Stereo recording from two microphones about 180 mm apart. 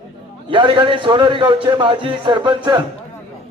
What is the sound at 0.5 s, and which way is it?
A man's voice, 30° right (ahead or behind).